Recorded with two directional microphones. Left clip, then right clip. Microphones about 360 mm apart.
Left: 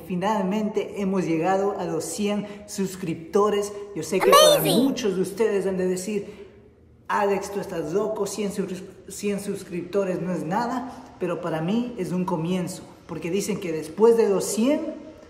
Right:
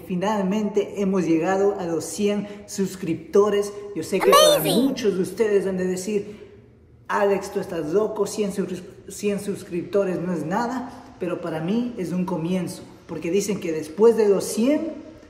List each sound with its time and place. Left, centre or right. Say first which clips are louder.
0.1 s a man's voice: right 1 dB; centre